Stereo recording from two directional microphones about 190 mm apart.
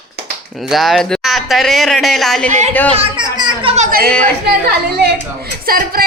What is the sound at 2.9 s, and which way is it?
Children playing, 25° right (ahead or behind).